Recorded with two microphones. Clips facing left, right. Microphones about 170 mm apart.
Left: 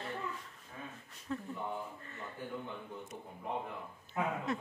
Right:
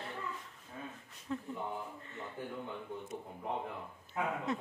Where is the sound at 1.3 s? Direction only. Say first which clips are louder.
Even; 15° right (ahead or behind).